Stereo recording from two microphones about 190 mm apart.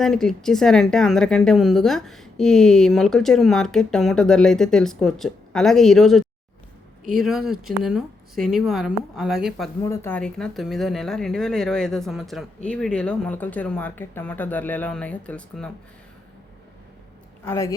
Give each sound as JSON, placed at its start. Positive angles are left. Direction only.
{"t": 0.0, "sound": "a woman's voice", "side_deg": 0}
{"t": 9.8, "sound": "a woman's voice", "side_deg": 15}
{"t": 17.4, "sound": "speech", "side_deg": 15}